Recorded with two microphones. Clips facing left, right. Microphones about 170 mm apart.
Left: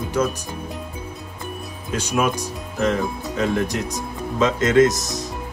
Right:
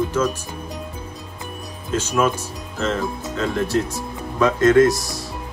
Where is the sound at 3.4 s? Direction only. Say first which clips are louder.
Right 1 dB; 15° left (ahead or behind).